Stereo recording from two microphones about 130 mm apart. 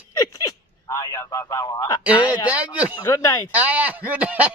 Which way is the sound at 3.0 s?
25° left (ahead or behind).